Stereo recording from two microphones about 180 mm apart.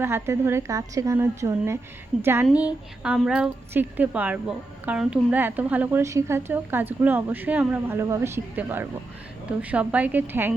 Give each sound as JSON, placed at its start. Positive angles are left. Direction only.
{"t": 0.0, "sound": "a woman's voice", "side_deg": -15}